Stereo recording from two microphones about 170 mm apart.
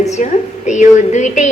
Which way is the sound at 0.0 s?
40° left (ahead or behind).